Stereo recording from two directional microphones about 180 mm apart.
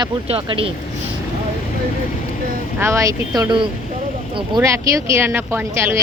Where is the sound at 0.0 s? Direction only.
30° right (ahead or behind).